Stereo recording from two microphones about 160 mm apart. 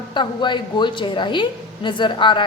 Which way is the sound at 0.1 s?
30° left (ahead or behind).